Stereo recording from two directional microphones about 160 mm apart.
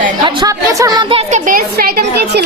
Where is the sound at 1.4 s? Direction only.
60° right (ahead or behind).